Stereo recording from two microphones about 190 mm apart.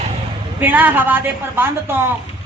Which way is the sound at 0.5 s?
10° right (ahead or behind).